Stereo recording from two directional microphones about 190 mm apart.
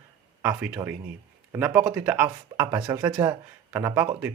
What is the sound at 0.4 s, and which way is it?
Speech, 10° right (ahead or behind).